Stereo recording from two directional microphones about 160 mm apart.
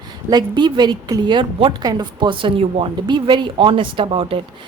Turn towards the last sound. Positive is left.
turn(degrees=-35)  # may be behind; listen again after turning